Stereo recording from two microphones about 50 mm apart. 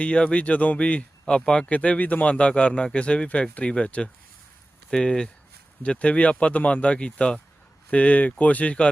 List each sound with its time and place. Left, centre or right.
0.0 s speech: left
1.6 s speech: left